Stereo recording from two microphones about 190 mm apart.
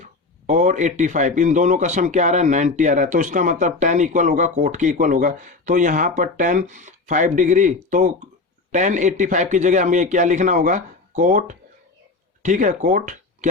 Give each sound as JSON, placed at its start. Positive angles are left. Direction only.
{"t": 0.0, "sound": "a man's voice", "side_deg": -40}